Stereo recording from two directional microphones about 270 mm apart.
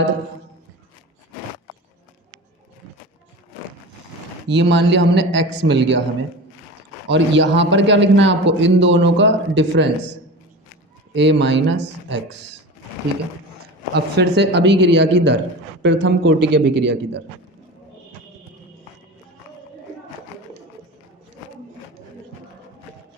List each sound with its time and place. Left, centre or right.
4.4 s a man's voice: right
7.1 s a man's voice: right
13.9 s a man's voice: right